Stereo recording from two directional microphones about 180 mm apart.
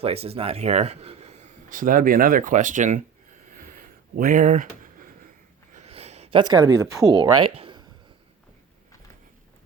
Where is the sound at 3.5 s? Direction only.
50° right (ahead or behind).